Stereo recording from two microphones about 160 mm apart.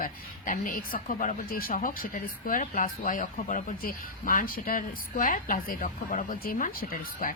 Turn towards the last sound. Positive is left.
turn(degrees=60)  # may be behind; listen again after turning